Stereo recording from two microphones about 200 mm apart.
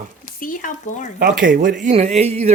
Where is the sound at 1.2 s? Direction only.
45° right (ahead or behind).